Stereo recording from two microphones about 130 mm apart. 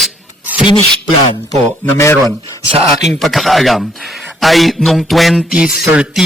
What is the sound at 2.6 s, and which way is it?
Speech, 55° right (ahead or behind).